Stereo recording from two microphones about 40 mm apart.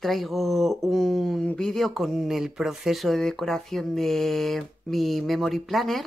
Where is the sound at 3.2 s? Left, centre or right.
Centre.